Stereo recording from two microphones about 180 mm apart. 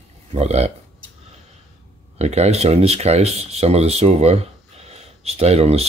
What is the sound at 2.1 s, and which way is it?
Speech, 35° right (ahead or behind).